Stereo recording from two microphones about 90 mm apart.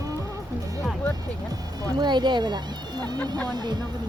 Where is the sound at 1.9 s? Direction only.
55° right (ahead or behind).